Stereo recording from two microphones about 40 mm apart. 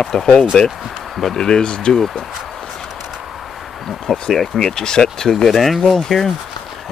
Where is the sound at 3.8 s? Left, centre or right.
Centre.